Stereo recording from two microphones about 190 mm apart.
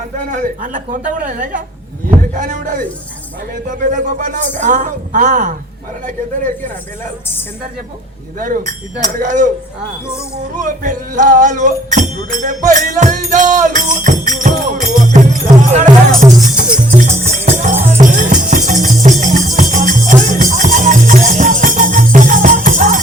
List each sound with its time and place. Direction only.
0.3 s a man's voice: 40° right (ahead or behind)
3.9 s a man's voice: 40° right (ahead or behind)
8.4 s speech: 45° right (ahead or behind)
10.6 s speech: 40° right (ahead or behind)
17.2 s music: 40° right (ahead or behind)